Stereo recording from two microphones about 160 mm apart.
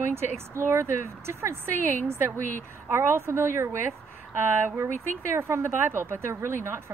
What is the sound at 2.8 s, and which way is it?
Speech, 15° right (ahead or behind).